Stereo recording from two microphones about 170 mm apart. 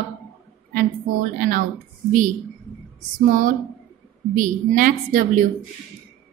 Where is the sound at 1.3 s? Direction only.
55° right (ahead or behind).